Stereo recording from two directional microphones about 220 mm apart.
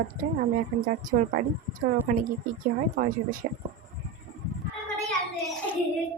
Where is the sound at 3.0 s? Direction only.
40° right (ahead or behind).